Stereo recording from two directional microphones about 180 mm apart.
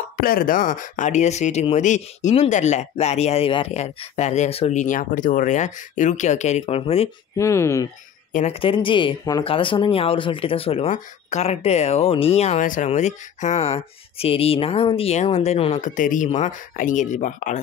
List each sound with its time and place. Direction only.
0.2 s speech: 55° left (ahead or behind); by 7.1 s 35° left (ahead or behind)
7.3 s speech: 15° left (ahead or behind)
8.3 s speech: 45° left (ahead or behind)
8.5 s speech: 30° left (ahead or behind)